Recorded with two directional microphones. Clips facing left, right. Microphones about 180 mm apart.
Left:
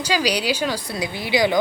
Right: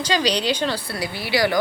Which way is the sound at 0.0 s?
10° left (ahead or behind).